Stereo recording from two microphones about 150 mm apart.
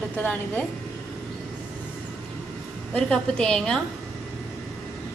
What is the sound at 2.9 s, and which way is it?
Speech, 5° left (ahead or behind).